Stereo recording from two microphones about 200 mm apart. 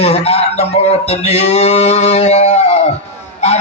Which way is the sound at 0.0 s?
30° left (ahead or behind).